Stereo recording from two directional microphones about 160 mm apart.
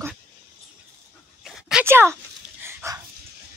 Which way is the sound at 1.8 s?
15° right (ahead or behind).